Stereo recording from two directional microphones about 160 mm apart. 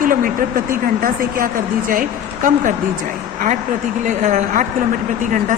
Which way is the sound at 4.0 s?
50° right (ahead or behind).